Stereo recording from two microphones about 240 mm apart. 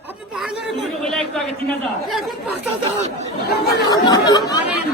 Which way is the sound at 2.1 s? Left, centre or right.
Centre.